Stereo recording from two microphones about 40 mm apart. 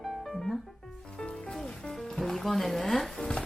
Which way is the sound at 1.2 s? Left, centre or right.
Left.